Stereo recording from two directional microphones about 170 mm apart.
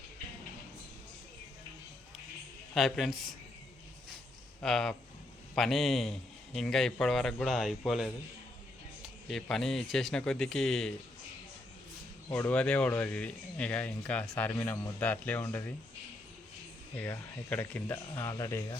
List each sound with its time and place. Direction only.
2.7 s a man's voice: centre (ahead or behind)
4.6 s a man's voice: 5° left (ahead or behind)
9.2 s a man's voice: centre (ahead or behind)
12.3 s speech: 10° left (ahead or behind)
16.9 s speech: 10° left (ahead or behind)